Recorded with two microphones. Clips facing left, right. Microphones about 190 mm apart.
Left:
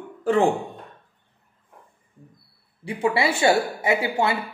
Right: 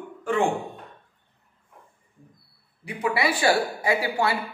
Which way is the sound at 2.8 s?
30° left (ahead or behind).